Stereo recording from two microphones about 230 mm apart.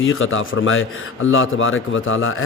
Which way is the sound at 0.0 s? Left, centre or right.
Left.